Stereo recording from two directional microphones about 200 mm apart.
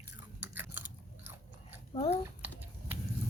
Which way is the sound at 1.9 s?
25° left (ahead or behind).